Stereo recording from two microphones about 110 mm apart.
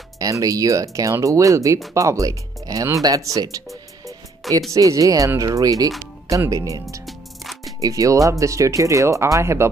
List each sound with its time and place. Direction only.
0.2 s speech: 30° right (ahead or behind)
4.0 s music: 30° right (ahead or behind)
4.7 s speech: 30° right (ahead or behind)
7.1 s music: centre (ahead or behind)
7.8 s speech: 30° right (ahead or behind)